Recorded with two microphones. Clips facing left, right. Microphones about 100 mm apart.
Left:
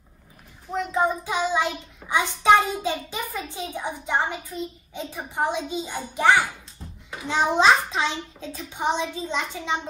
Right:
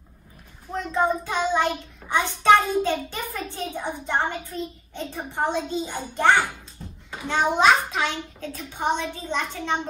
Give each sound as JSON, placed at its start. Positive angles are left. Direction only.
{"t": 0.9, "sound": "child singing", "side_deg": 10}
{"t": 7.2, "sound": "child singing", "side_deg": 20}